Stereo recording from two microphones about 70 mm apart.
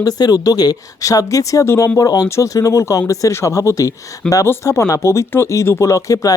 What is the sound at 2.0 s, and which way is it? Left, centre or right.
Speech, left.